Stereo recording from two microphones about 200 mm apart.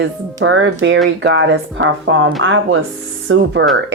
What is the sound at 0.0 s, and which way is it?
A woman's voice, 70° right (ahead or behind).